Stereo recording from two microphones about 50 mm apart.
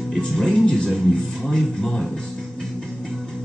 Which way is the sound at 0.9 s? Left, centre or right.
Centre.